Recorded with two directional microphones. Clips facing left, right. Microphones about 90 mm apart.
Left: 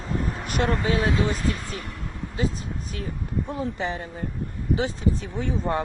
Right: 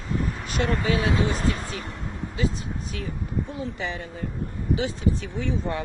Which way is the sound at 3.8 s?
35° left (ahead or behind).